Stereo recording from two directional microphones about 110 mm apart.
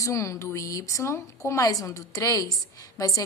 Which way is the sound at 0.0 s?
30° left (ahead or behind).